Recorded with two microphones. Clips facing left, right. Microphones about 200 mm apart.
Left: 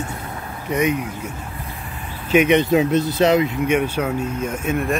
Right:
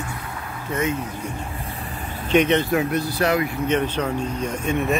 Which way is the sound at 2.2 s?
10° left (ahead or behind).